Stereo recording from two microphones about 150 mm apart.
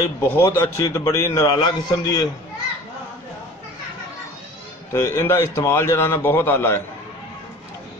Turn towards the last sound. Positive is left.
turn(degrees=15)  # may be behind; listen again after turning